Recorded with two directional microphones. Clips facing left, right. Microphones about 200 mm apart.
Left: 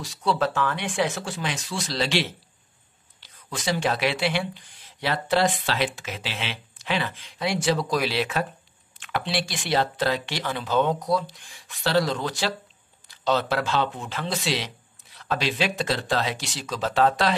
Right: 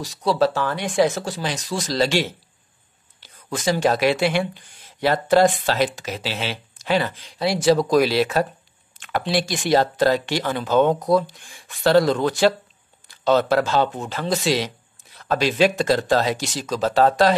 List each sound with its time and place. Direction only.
0.0 s speech: 40° right (ahead or behind)